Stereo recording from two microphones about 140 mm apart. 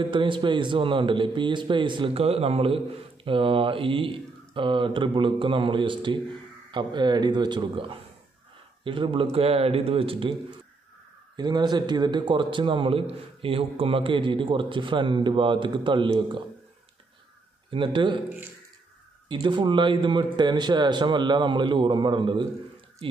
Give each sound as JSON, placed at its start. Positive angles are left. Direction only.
{"t": 0.0, "sound": "a man's voice", "side_deg": -35}
{"t": 11.3, "sound": "a man's voice", "side_deg": -30}
{"t": 17.6, "sound": "a man's voice", "side_deg": -35}
{"t": 19.2, "sound": "a man's voice", "side_deg": -35}